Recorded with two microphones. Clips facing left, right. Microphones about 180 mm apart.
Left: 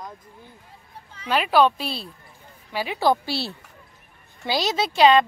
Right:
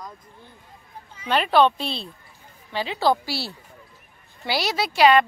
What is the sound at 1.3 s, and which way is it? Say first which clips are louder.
A woman's voice: even; 5° left (ahead or behind).